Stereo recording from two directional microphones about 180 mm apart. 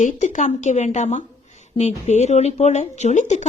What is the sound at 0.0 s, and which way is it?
A woman's voice, 40° left (ahead or behind).